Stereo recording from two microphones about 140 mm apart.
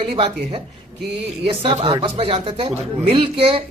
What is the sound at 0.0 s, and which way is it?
Speech, 40° right (ahead or behind).